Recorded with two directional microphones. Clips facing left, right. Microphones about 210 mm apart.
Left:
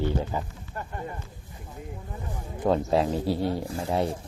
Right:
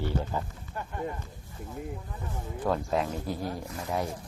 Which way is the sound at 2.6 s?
25° left (ahead or behind).